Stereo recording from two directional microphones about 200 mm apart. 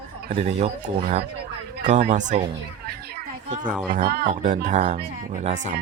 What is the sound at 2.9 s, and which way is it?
Chatter, 50° right (ahead or behind).